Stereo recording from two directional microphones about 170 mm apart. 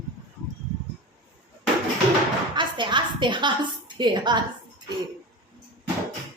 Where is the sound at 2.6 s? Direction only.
25° right (ahead or behind).